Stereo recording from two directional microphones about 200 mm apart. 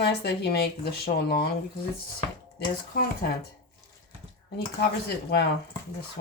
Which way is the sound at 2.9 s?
50° left (ahead or behind).